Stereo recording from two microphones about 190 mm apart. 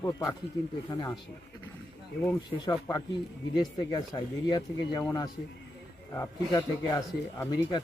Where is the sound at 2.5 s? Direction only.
20° left (ahead or behind).